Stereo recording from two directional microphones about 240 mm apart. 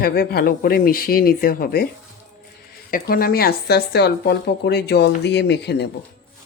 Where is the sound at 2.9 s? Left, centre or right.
Left.